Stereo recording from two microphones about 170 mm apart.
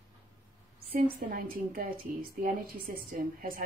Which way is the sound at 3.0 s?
55° right (ahead or behind).